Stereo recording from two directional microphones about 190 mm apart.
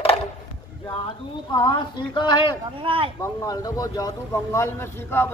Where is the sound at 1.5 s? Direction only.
25° left (ahead or behind).